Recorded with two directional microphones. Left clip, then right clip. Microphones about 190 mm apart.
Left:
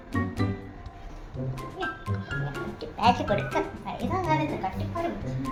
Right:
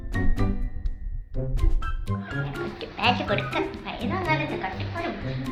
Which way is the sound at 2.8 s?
25° left (ahead or behind).